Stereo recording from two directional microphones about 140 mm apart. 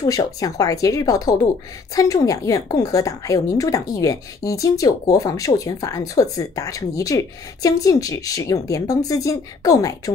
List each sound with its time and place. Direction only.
0.0 s a woman's voice: 25° left (ahead or behind)